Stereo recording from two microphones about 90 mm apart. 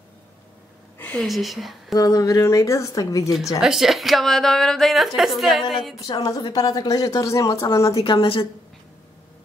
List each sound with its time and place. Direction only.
0.9 s a sound: 20° left (ahead or behind)
1.2 s a woman's voice: centre (ahead or behind)
2.0 s speech: 40° left (ahead or behind)
3.6 s a woman's voice: 5° right (ahead or behind)
6.0 s a woman's voice: 45° left (ahead or behind)
8.0 s a woman's voice: 80° left